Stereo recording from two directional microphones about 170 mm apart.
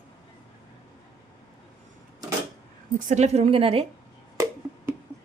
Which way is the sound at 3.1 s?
40° right (ahead or behind).